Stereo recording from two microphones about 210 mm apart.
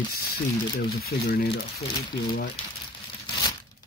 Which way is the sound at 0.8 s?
45° left (ahead or behind).